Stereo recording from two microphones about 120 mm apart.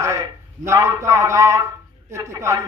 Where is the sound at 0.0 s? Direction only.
25° right (ahead or behind).